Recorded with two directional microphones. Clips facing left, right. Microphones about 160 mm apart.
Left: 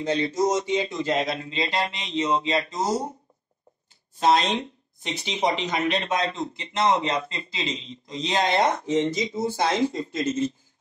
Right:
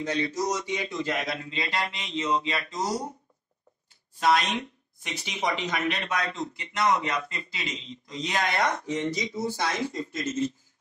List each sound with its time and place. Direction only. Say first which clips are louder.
0.0 s a woman's voice: left 5 dB; 25° left (ahead or behind)
4.2 s a woman's voice: left 3 dB; 25° left (ahead or behind)